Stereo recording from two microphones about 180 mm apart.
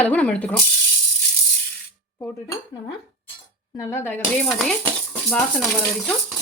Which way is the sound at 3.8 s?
15° left (ahead or behind).